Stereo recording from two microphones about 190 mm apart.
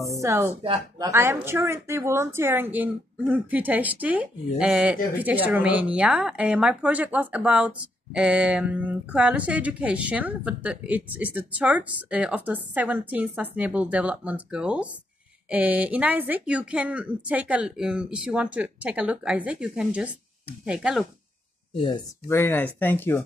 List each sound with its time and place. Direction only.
0.2 s a woman's voice: 15° right (ahead or behind)
21.7 s speech: 25° left (ahead or behind)
22.3 s speech: 10° left (ahead or behind)